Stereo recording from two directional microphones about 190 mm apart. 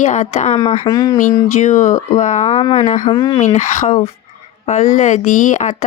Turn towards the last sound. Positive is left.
turn(degrees=40)  # may be behind; listen again after turning